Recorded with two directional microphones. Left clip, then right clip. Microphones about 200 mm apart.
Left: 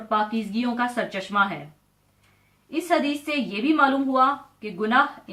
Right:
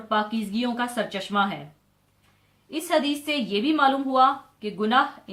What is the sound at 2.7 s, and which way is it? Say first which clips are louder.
A woman's voice: left 1 dB; 30° right (ahead or behind).